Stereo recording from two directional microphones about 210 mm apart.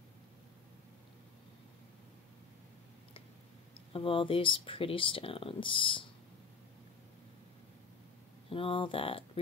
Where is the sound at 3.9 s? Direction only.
25° left (ahead or behind).